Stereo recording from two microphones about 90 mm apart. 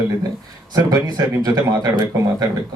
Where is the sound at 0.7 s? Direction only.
40° right (ahead or behind).